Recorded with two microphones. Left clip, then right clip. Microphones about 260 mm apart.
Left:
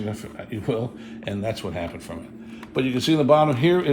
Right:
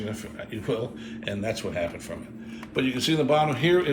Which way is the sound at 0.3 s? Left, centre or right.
Left.